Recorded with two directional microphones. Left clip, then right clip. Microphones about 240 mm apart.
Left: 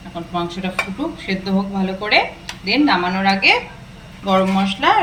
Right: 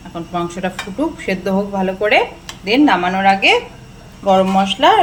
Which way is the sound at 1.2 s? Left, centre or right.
Centre.